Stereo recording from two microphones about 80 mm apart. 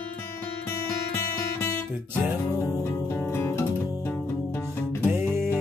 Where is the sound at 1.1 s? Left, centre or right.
Left.